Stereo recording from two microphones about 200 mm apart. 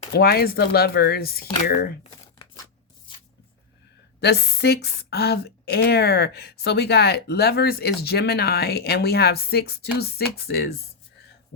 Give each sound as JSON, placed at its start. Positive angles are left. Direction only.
{"t": 0.1, "sound": "speech", "side_deg": 50}
{"t": 4.2, "sound": "speech", "side_deg": 55}